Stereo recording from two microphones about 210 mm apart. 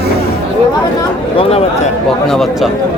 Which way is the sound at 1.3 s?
30° left (ahead or behind).